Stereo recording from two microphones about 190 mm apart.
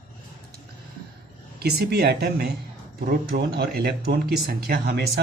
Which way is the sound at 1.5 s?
55° right (ahead or behind).